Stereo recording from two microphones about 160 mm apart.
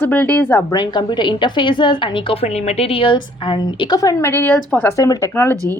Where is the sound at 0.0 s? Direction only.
10° left (ahead or behind).